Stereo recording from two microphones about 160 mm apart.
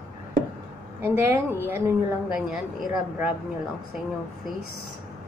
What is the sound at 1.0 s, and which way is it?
A woman's voice, 15° right (ahead or behind).